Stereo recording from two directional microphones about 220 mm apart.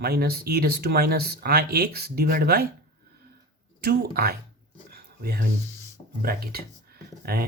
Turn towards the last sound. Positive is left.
turn(degrees=-45)  # may be behind; listen again after turning